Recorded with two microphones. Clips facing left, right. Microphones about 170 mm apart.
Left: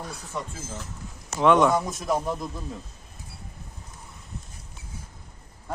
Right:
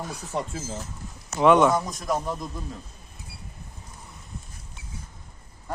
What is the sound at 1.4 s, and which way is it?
Speech, 5° right (ahead or behind).